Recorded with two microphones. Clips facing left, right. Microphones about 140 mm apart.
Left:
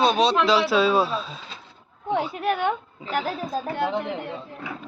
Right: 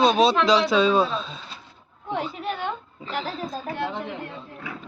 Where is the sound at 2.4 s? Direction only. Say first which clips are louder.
Left 6 dB; 65° left (ahead or behind).